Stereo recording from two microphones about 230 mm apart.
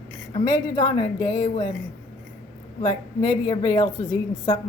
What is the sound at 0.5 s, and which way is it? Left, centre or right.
Speech, centre.